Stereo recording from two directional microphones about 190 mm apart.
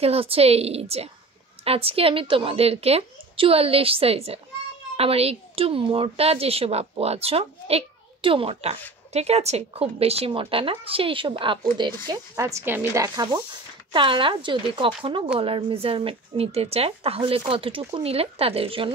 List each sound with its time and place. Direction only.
0.0 s a woman's voice: 30° right (ahead or behind)